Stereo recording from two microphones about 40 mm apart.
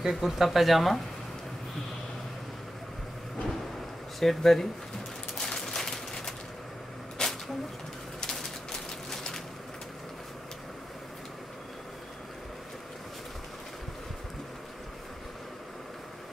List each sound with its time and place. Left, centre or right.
0.0 s speech: centre
4.2 s speech: centre
5.4 s a sound: centre